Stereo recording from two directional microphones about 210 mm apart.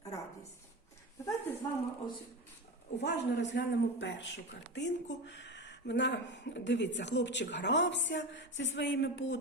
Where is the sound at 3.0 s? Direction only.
55° left (ahead or behind).